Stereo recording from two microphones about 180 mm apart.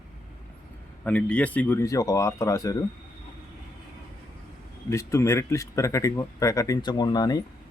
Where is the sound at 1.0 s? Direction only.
10° left (ahead or behind).